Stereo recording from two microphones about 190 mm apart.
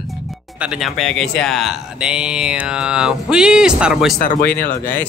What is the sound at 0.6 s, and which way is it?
Speech, 5° right (ahead or behind).